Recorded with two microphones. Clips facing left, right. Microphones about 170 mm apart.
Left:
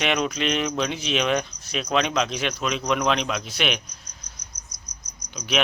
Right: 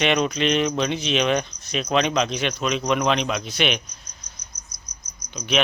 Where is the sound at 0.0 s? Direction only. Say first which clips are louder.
Right 3 dB; 5° left (ahead or behind).